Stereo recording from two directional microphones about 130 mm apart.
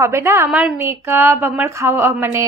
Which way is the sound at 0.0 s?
20° right (ahead or behind).